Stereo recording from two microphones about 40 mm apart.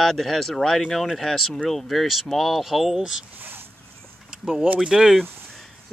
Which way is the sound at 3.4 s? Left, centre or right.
Right.